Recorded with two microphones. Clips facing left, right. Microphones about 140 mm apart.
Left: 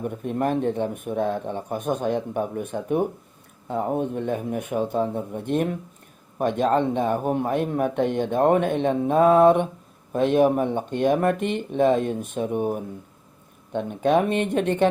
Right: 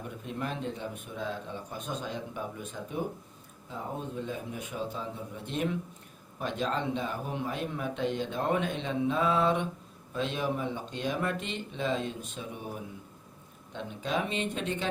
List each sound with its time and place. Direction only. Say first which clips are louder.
0.0 s speech: left 11 dB; 50° left (ahead or behind)